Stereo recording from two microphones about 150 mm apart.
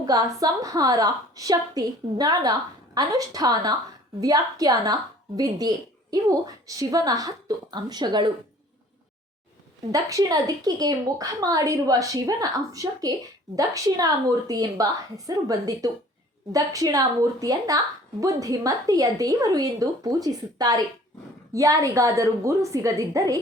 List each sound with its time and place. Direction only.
0.0 s a woman's voice: 25° right (ahead or behind)
9.9 s a woman's voice: 25° right (ahead or behind)